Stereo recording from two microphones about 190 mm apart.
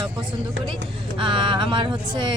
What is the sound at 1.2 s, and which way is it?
Speech, 25° right (ahead or behind).